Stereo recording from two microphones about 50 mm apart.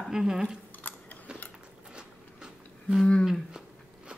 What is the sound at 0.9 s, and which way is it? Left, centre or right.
Chewing, left.